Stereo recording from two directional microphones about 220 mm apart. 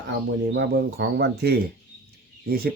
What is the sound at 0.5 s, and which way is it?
Speech, 50° right (ahead or behind).